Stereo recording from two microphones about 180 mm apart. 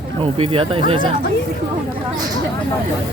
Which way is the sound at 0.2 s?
30° right (ahead or behind).